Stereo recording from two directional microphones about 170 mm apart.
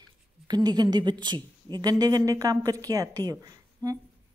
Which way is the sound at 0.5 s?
25° right (ahead or behind).